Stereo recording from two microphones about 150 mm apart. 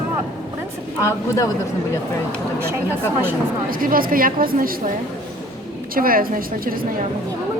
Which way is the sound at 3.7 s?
70° right (ahead or behind).